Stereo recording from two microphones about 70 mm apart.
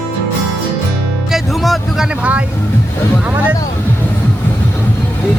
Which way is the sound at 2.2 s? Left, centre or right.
Centre.